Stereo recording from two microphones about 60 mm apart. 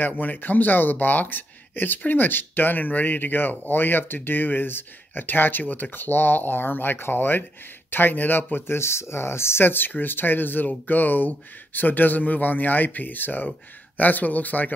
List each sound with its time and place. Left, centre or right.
0.0 s speech: left